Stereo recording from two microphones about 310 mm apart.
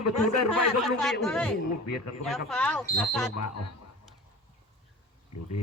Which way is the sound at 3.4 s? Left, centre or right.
Left.